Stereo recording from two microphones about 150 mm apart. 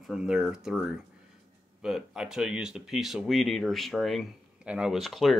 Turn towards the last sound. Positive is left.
turn(degrees=0)  # may be behind; listen again after turning